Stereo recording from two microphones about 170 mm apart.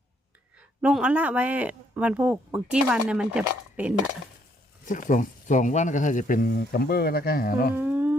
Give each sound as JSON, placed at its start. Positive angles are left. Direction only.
{"t": 0.8, "sound": "speech", "side_deg": -5}
{"t": 4.9, "sound": "speech", "side_deg": 50}
{"t": 7.8, "sound": "music", "side_deg": -10}